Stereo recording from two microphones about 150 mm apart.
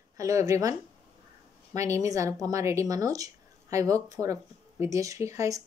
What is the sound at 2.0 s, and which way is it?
Speech, 20° right (ahead or behind).